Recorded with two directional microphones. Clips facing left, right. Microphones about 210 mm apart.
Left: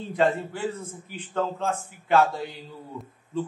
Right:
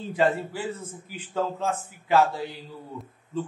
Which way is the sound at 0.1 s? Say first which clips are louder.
Even; centre (ahead or behind).